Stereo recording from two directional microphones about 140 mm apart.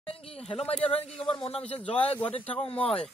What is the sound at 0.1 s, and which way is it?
A man's voice, 45° left (ahead or behind).